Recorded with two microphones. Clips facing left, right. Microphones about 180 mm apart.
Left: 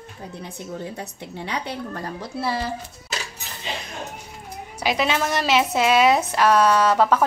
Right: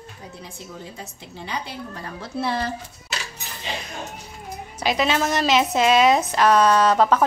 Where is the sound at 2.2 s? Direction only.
5° left (ahead or behind).